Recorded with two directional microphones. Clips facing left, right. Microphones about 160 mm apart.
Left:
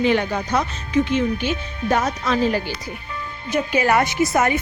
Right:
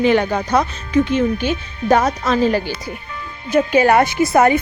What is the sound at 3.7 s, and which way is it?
Speech, 30° right (ahead or behind).